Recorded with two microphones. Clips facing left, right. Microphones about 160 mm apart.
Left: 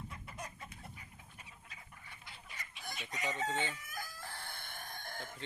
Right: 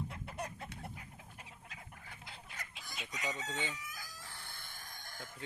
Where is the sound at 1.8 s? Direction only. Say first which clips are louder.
Right 3 dB; 60° right (ahead or behind).